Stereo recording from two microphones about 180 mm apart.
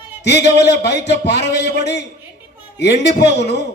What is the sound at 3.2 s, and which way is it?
Speech, 70° left (ahead or behind).